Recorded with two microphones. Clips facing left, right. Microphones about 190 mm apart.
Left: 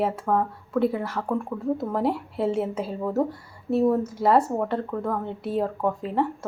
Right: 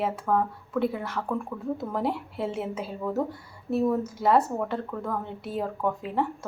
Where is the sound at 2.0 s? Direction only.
Centre (ahead or behind).